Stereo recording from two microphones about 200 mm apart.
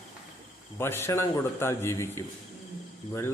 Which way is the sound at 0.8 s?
10° left (ahead or behind).